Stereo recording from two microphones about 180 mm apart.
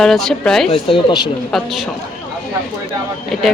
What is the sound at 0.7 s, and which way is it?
Speech, 30° left (ahead or behind).